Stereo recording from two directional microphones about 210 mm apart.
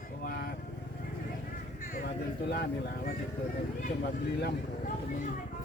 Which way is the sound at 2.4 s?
50° left (ahead or behind).